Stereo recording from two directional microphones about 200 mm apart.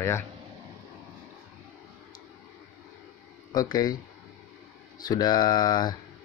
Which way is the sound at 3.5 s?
20° left (ahead or behind).